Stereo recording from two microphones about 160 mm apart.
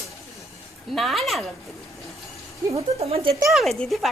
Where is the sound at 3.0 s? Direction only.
40° right (ahead or behind).